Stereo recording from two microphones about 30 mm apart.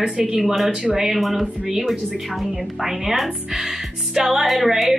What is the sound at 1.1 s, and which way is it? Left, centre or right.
Speech, centre.